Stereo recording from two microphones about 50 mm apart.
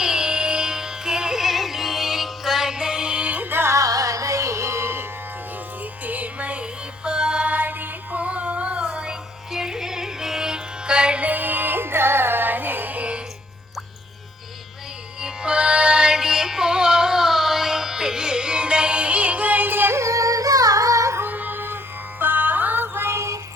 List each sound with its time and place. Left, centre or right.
0.0 s music: centre
3.2 s music: right
3.7 s music: right
6.1 s music: right
7.4 s music: right
11.3 s music: right
15.2 s music: centre; by 19.9 s right
19.9 s yodeling: right
20.8 s music: right
21.2 s music: right
23.1 s music: right